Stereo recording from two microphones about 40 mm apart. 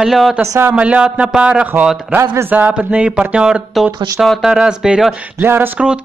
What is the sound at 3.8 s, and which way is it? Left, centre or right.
Speech, centre.